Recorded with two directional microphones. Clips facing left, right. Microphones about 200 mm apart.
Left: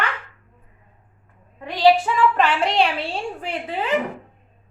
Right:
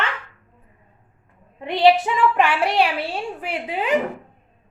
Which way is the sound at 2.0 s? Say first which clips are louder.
Even; 15° right (ahead or behind).